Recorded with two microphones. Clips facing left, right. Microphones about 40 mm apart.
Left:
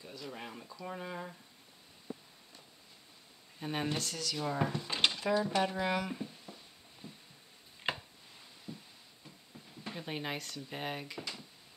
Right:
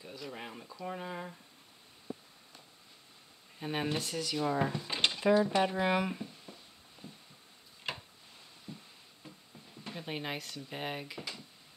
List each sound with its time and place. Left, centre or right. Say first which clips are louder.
0.0 s speech: right 1 dB; centre
3.5 s speech: right 1 dB; centre
6.1 s a sound: left 1 dB; centre
7.8 s chopping: left 3 dB; left
8.7 s music: left 1 dB; centre
9.8 s speech: even; centre